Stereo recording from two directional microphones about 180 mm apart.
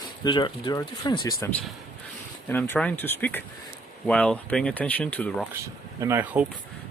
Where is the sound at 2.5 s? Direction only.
10° left (ahead or behind).